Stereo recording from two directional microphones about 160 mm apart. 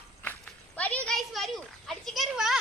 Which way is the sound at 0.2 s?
10° left (ahead or behind).